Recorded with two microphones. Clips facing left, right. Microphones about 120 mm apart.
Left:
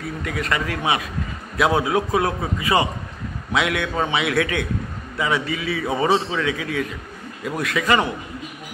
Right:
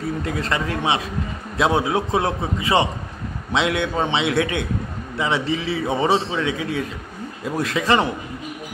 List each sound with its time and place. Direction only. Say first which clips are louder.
0.2 s a man's voice: right 1 dB; 30° right (ahead or behind)